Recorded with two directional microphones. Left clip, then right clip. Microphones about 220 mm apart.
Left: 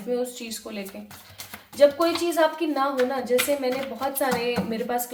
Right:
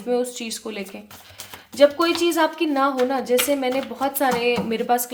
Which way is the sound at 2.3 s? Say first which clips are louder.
Right 2 dB; 45° right (ahead or behind).